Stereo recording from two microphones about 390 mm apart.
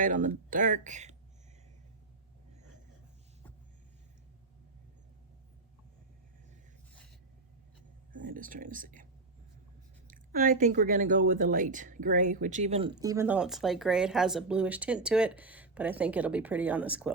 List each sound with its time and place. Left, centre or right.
0.0 s speech: centre
8.1 s speech: centre
10.1 s speech: right; by 17.2 s centre